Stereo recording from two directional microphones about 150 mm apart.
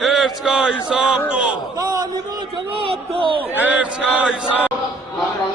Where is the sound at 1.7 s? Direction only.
25° right (ahead or behind).